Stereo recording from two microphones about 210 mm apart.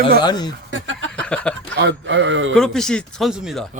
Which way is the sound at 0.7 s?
65° right (ahead or behind).